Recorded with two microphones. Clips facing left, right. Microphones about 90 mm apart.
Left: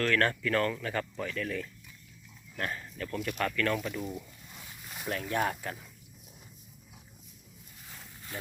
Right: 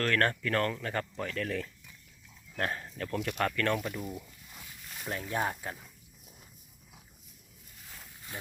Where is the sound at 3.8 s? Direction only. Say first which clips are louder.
Left 1 dB; 10° right (ahead or behind).